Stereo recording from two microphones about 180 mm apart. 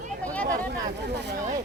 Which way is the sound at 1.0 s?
70° right (ahead or behind).